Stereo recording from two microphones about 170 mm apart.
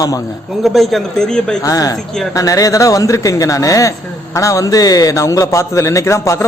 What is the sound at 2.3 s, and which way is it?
A man's voice, 20° left (ahead or behind).